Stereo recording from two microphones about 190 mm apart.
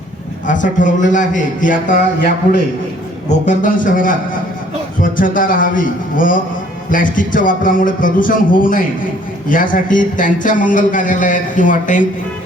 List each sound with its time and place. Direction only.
0.4 s speech: 40° left (ahead or behind)